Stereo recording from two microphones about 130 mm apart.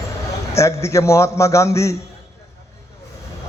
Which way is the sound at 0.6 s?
20° left (ahead or behind).